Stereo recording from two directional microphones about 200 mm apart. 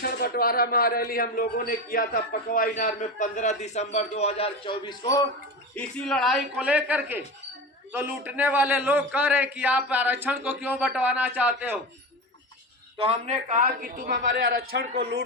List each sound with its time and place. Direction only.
0.0 s a man's voice: 50° left (ahead or behind); by 5.2 s 20° left (ahead or behind)
5.7 s a man's voice: 5° left (ahead or behind)
13.0 s a man's voice: 30° right (ahead or behind); by 15.2 s 50° right (ahead or behind)